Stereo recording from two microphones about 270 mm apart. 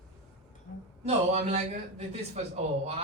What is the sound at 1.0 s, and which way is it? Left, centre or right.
A man's voice, right.